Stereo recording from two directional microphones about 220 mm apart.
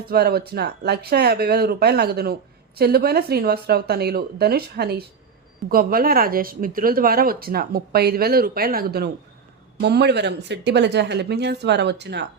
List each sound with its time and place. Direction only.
0.0 s speech: 45° right (ahead or behind)